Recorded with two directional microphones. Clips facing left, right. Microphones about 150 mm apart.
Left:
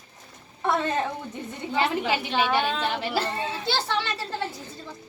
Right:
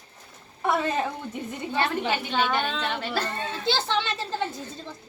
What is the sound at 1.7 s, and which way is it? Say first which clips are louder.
A woman's voice: left 2 dB; 10° left (ahead or behind).